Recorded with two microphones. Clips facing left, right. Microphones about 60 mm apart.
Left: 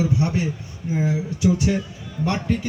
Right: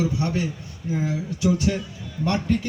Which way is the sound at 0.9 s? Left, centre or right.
Centre.